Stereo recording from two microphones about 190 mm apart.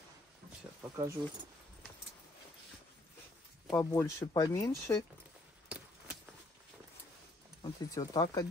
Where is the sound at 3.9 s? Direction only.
20° left (ahead or behind).